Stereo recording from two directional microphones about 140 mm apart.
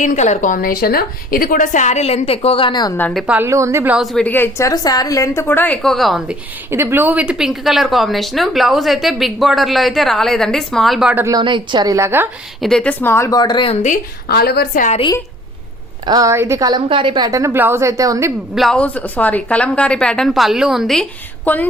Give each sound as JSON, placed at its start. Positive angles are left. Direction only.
{"t": 0.0, "sound": "a woman's voice", "side_deg": 60}
{"t": 3.2, "sound": "a woman's voice", "side_deg": -10}
{"t": 3.9, "sound": "a woman's voice", "side_deg": 0}
{"t": 4.3, "sound": "a woman's voice", "side_deg": 15}
{"t": 6.7, "sound": "a woman's voice", "side_deg": -15}
{"t": 11.1, "sound": "speech", "side_deg": -15}
{"t": 11.3, "sound": "a woman's voice", "side_deg": -35}
{"t": 12.5, "sound": "a woman's voice", "side_deg": 5}
{"t": 13.8, "sound": "a woman's voice", "side_deg": 80}
{"t": 16.0, "sound": "a woman's voice", "side_deg": -25}
{"t": 18.5, "sound": "a woman's voice", "side_deg": 0}